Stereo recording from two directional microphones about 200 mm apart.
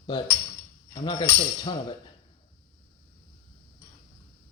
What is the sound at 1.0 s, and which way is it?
Speech, 20° left (ahead or behind).